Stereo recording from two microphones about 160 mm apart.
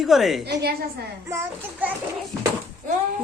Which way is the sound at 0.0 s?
Centre (ahead or behind).